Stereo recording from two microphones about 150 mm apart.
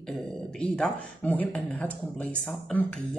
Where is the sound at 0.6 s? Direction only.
5° left (ahead or behind).